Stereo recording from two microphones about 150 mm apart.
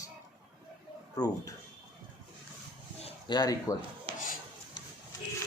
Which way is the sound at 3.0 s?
30° left (ahead or behind).